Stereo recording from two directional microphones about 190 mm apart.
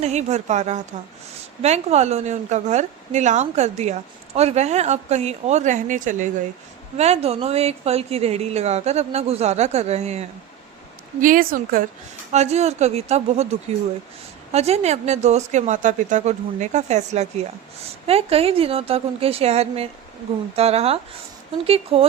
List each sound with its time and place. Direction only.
0.0 s a woman's voice: 35° right (ahead or behind)
11.2 s speech: 45° right (ahead or behind)
12.3 s a woman's voice: 35° right (ahead or behind)